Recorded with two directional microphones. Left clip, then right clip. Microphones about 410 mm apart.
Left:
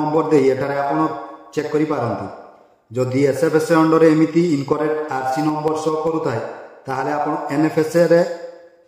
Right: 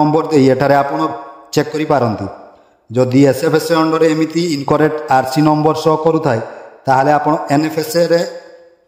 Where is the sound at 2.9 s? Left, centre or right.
Right.